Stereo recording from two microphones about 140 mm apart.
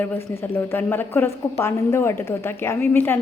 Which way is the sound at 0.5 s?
15° left (ahead or behind).